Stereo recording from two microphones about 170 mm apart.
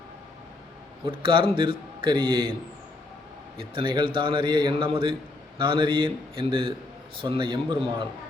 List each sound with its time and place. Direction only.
1.0 s a man's voice: 30° right (ahead or behind)
3.8 s a man's voice: 30° right (ahead or behind)